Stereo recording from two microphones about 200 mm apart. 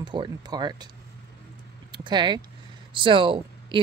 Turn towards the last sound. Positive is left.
turn(degrees=-25)  # may be behind; listen again after turning